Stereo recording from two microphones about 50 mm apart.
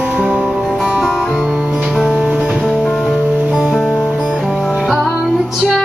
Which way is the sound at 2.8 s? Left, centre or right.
Centre.